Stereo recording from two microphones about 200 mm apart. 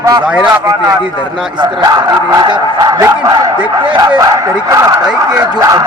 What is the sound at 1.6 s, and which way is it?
Speech, 20° right (ahead or behind).